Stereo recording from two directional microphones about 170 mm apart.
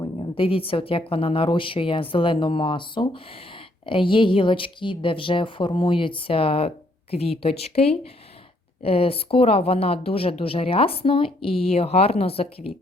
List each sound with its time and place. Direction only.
0.0 s speech: 30° left (ahead or behind)